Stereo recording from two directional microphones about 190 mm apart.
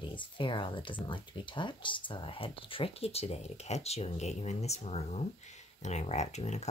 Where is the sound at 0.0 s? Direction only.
25° left (ahead or behind).